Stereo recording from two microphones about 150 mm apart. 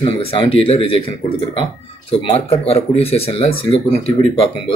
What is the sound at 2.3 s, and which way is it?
Speech, 40° left (ahead or behind).